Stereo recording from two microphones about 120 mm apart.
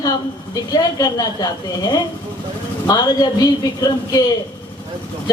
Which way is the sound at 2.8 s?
30° left (ahead or behind).